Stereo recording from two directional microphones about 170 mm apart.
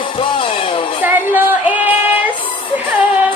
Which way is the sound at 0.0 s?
30° left (ahead or behind).